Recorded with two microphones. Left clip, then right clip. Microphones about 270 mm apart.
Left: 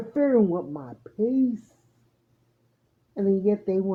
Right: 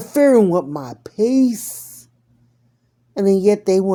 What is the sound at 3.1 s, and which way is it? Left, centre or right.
Speech, right.